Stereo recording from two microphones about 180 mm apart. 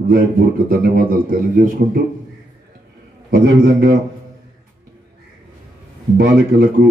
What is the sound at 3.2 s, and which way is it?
Speech, 55° right (ahead or behind).